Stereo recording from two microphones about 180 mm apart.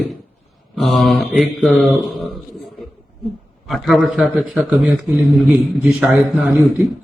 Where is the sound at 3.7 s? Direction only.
Centre (ahead or behind).